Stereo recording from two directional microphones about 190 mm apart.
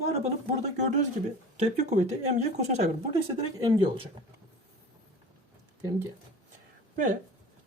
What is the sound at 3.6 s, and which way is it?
Speech, 25° right (ahead or behind).